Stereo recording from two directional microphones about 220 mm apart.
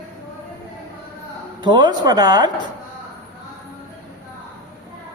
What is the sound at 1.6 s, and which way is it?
Speech, 20° right (ahead or behind).